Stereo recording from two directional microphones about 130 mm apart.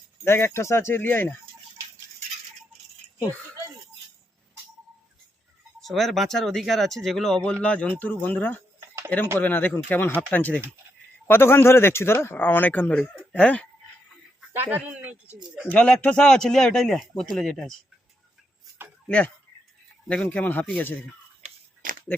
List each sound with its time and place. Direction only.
0.3 s speech: 20° left (ahead or behind)
5.8 s speech: centre (ahead or behind)
14.5 s speech: 15° right (ahead or behind)
15.5 s speech: 10° left (ahead or behind)
19.0 s speech: 10° left (ahead or behind)
21.4 s a sound: 90° right